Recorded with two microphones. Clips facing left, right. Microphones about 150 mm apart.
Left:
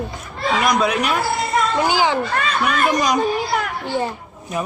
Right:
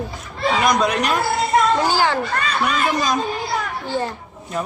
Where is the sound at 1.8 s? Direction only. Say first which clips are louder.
Left 1 dB; 15° left (ahead or behind).